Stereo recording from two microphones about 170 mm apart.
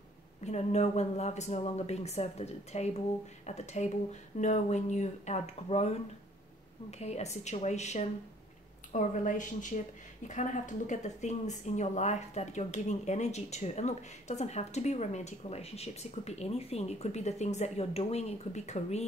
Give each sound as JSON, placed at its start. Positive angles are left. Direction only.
{"t": 0.4, "sound": "a woman's voice", "side_deg": 40}